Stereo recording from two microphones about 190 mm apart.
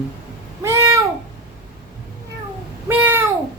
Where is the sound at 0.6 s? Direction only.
15° right (ahead or behind).